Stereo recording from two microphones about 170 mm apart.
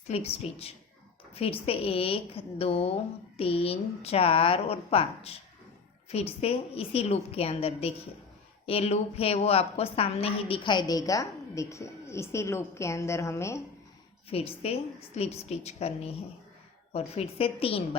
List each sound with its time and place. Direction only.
0.1 s a woman's voice: 35° left (ahead or behind); by 13.6 s 15° left (ahead or behind)
14.3 s a woman's voice: 35° left (ahead or behind)